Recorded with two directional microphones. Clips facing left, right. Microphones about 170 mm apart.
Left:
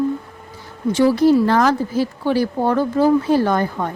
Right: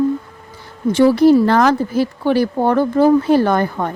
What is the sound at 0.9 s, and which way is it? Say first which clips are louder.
Speech: right 3 dB; 60° right (ahead or behind).